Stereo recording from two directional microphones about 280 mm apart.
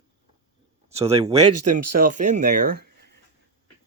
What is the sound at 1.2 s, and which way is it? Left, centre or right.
Speech, centre.